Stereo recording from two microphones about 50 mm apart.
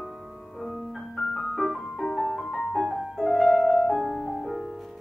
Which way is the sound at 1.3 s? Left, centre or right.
Centre.